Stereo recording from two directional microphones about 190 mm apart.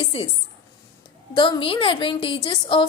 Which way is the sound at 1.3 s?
25° left (ahead or behind).